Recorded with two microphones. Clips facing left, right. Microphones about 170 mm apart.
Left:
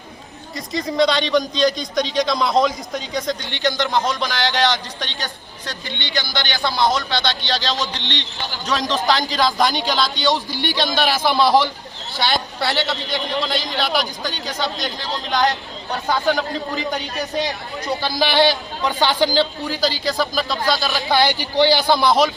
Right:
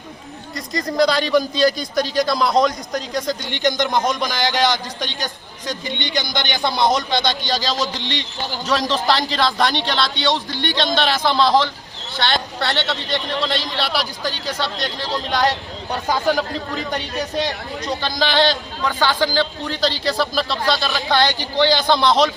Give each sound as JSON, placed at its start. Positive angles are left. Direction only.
{"t": 0.5, "sound": "a man's voice", "side_deg": 0}
{"t": 3.5, "sound": "a man's voice", "side_deg": -15}